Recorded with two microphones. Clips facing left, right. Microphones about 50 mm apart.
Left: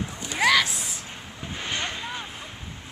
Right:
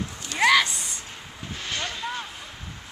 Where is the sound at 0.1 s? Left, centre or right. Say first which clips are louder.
Left 2 dB; centre.